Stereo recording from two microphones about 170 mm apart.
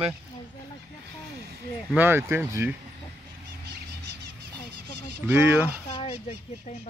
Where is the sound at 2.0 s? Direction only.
15° right (ahead or behind).